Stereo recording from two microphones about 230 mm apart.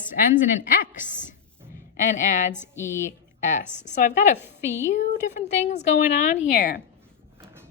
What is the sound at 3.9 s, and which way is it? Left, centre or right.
Speech, left.